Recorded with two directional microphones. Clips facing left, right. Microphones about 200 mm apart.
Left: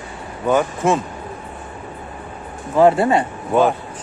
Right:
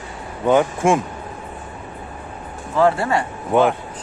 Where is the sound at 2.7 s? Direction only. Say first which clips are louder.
Left 4 dB; 20° left (ahead or behind).